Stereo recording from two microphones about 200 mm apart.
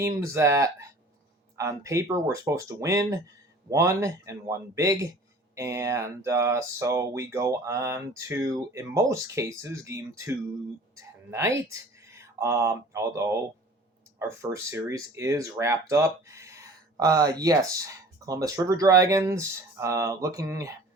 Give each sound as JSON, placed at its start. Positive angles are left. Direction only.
{"t": 0.3, "sound": "speech", "side_deg": -15}